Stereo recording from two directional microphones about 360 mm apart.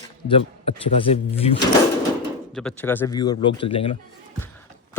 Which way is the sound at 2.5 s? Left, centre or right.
Centre.